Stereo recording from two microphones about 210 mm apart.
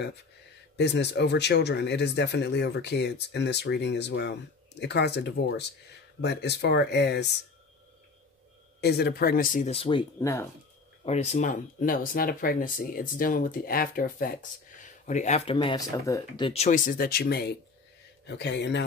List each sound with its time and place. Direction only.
0.7 s speech: 55° left (ahead or behind)
8.8 s speech: 50° left (ahead or behind); by 10.0 s 25° left (ahead or behind)
11.1 s speech: 35° left (ahead or behind); by 18.9 s 55° left (ahead or behind)